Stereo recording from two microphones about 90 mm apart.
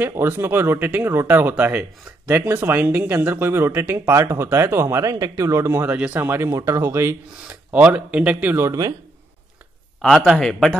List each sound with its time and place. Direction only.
0.0 s speech: 25° right (ahead or behind)
5.9 s speech: 15° right (ahead or behind)
7.7 s speech: 15° right (ahead or behind)
8.6 s speech: 40° right (ahead or behind)
10.0 s a man's voice: centre (ahead or behind)